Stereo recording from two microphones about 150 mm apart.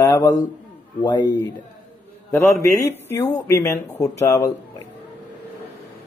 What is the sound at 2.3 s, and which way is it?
Speech, 15° left (ahead or behind).